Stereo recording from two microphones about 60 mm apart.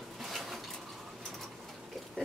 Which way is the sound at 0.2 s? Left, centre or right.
Centre.